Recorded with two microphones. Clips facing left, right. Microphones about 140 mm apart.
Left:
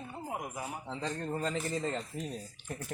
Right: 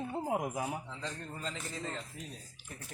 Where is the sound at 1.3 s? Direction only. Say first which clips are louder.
Left 8 dB; 50° left (ahead or behind).